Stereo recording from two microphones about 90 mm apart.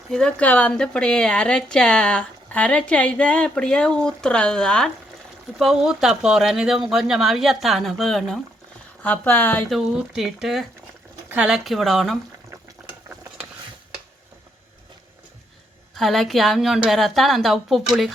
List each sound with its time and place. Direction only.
0.1 s speech: 10° left (ahead or behind)
5.5 s speech: 5° right (ahead or behind)
9.0 s speech: 20° left (ahead or behind)
9.6 s speech: 5° right (ahead or behind)
16.0 s speech: centre (ahead or behind)